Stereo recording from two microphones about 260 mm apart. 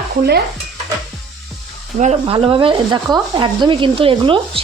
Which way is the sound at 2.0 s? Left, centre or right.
Right.